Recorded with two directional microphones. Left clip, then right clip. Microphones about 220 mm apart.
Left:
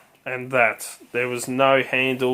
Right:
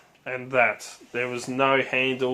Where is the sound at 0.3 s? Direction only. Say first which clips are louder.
Left 2 dB; 40° left (ahead or behind).